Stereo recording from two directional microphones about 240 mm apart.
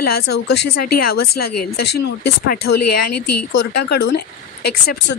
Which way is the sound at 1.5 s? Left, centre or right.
Left.